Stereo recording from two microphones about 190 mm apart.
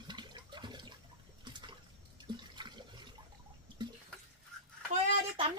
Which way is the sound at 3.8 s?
25° right (ahead or behind).